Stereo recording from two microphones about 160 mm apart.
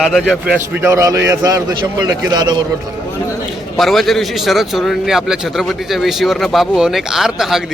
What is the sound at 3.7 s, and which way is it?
A man's voice, centre (ahead or behind).